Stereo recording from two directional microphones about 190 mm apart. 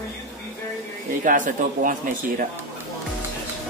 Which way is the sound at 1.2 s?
40° right (ahead or behind).